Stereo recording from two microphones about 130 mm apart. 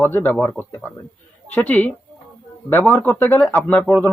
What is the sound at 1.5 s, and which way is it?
Speech, 15° left (ahead or behind).